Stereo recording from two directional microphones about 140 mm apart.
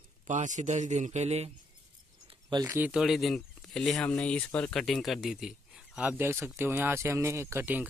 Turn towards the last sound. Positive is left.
turn(degrees=-15)  # may be behind; listen again after turning